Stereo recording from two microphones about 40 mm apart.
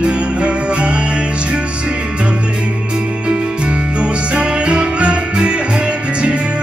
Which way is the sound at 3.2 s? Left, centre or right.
Right.